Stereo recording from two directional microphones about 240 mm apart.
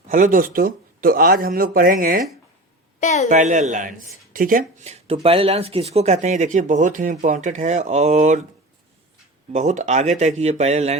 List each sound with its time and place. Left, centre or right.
0.1 s speech: right
3.0 s a woman's voice: left
3.2 s speech: right
9.5 s speech: right